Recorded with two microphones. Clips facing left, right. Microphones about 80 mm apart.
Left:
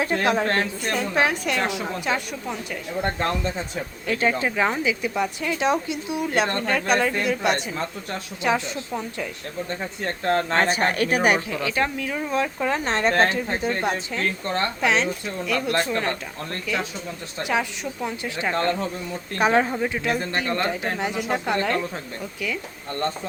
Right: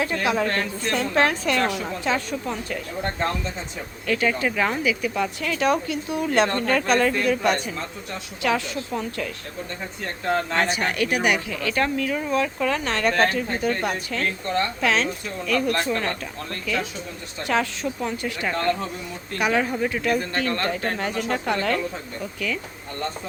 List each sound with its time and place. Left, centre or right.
0.0 s a woman's voice: left
0.3 s speech: left
0.9 s speech: centre
4.0 s speech: left
10.3 s speech: left
11.6 s speech: centre
12.3 s speech: left
17.4 s speech: centre; by 19.7 s left
19.7 s speech: centre